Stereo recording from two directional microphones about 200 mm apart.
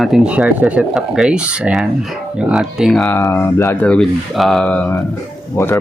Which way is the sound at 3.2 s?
15° left (ahead or behind).